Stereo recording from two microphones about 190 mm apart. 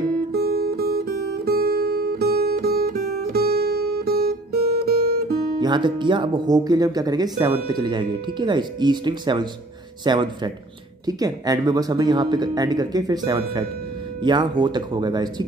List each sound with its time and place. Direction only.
0.3 s guitar: 55° right (ahead or behind)
5.6 s speech: 25° right (ahead or behind)